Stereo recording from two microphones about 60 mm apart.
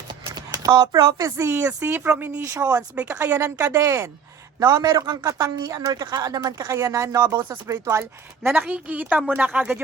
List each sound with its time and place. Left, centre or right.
0.3 s speech: right
1.5 s speech: right
2.4 s speech: right
2.9 s speech: right
4.6 s speech: right
7.7 s speech: right
8.5 s a woman's voice: right